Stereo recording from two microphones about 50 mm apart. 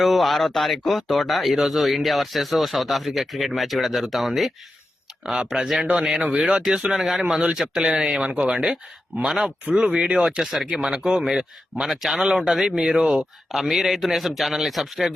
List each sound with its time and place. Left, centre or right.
0.0 s speech: centre
6.2 s speech: right
6.9 s speech: centre
9.6 s speech: right; by 15.1 s centre